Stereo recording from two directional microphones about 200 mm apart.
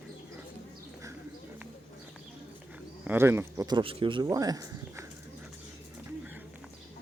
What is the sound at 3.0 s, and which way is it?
Speech, 10° right (ahead or behind).